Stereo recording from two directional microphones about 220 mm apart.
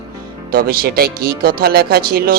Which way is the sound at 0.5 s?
45° right (ahead or behind).